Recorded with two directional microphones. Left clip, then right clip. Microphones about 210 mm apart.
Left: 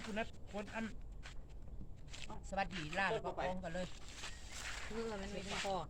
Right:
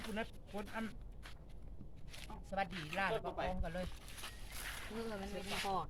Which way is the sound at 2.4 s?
10° right (ahead or behind).